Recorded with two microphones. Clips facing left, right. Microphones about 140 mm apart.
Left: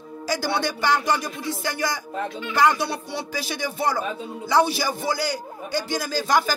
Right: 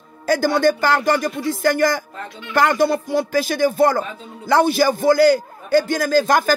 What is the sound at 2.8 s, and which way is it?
Music, 50° right (ahead or behind).